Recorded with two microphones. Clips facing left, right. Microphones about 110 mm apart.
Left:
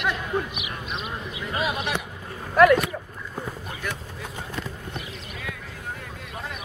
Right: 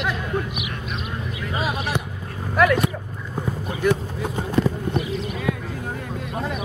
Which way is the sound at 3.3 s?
15° right (ahead or behind).